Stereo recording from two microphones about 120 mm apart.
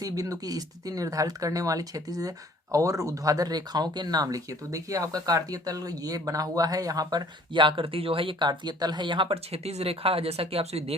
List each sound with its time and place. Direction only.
0.0 s speech: 30° right (ahead or behind); by 10.9 s 60° right (ahead or behind)